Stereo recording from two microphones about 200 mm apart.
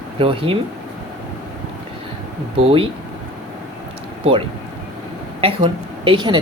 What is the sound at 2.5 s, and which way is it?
Speech, 30° right (ahead or behind).